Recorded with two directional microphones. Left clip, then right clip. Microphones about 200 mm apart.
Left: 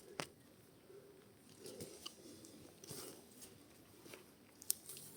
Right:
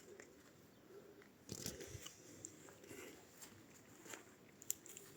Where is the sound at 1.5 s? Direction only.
40° right (ahead or behind).